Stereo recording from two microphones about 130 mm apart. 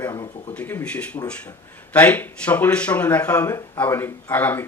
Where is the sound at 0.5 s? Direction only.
15° left (ahead or behind).